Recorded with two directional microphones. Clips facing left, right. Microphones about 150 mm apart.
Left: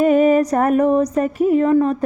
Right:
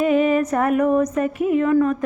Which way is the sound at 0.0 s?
40° left (ahead or behind).